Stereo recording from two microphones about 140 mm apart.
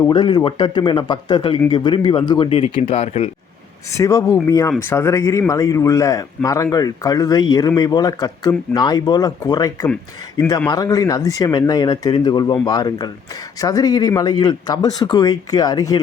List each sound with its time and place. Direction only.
0.1 s speech: 35° left (ahead or behind); by 3.2 s 50° left (ahead or behind)
3.9 s speech: 20° left (ahead or behind)